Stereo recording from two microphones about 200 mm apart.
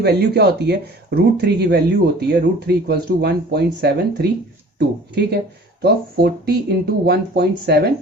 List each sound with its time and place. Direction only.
0.0 s speech: 55° right (ahead or behind)